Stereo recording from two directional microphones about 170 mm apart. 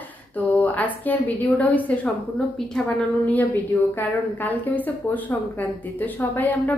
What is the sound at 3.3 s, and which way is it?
A woman's voice, 10° left (ahead or behind).